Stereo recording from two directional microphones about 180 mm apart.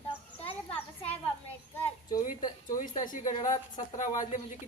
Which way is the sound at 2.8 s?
45° left (ahead or behind).